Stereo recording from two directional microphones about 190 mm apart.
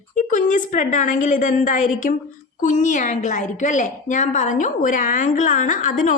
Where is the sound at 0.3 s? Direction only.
40° left (ahead or behind).